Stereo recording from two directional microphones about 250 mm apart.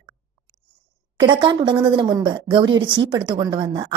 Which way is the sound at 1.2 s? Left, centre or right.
Centre.